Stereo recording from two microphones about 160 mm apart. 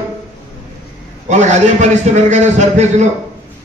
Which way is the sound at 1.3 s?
45° right (ahead or behind).